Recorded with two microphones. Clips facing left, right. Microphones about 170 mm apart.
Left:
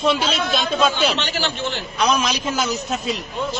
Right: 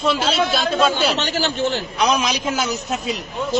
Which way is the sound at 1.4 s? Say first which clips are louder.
Right 4 dB; 45° right (ahead or behind).